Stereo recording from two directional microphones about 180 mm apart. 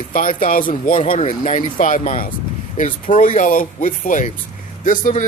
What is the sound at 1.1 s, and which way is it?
Speech, 40° left (ahead or behind).